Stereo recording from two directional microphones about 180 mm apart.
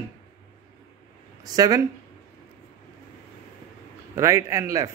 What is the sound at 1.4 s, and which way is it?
Speech, 20° right (ahead or behind).